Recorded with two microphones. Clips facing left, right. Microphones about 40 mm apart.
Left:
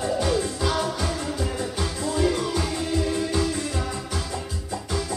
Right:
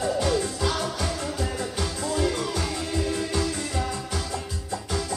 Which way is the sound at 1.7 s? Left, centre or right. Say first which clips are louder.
Left 1 dB; centre.